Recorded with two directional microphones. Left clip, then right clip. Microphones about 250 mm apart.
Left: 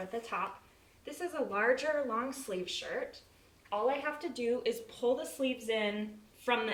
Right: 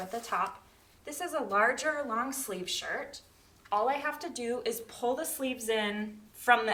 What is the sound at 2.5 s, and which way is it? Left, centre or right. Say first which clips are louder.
A woman's voice: right 2 dB; right.